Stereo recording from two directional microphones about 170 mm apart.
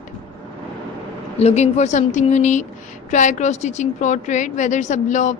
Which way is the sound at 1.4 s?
40° left (ahead or behind).